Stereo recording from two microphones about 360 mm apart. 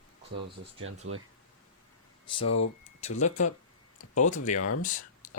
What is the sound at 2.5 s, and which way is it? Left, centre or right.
Speech, left.